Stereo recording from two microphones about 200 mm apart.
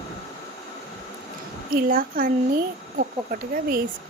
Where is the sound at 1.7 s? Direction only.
45° right (ahead or behind).